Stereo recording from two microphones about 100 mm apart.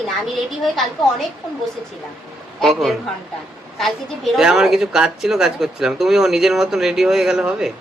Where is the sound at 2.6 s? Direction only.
Centre (ahead or behind).